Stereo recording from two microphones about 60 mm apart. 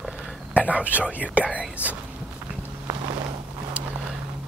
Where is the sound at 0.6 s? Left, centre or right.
Right.